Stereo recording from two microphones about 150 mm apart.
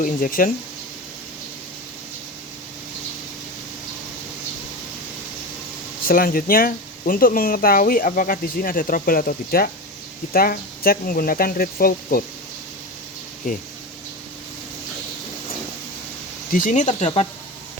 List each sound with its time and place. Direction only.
0.0 s speech: 65° left (ahead or behind)
6.1 s speech: 70° left (ahead or behind)
13.5 s speech: 60° left (ahead or behind)
16.5 s speech: 65° left (ahead or behind)